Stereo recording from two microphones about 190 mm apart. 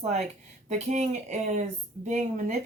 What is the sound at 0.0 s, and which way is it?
Speech, 35° right (ahead or behind).